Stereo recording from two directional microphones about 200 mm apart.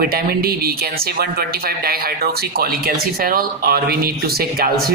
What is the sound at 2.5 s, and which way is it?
Speech, 45° right (ahead or behind).